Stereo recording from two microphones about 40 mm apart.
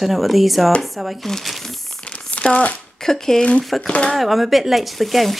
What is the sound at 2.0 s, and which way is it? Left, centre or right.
Crumpling, left.